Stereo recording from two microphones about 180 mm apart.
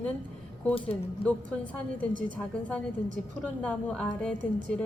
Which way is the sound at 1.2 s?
30° left (ahead or behind).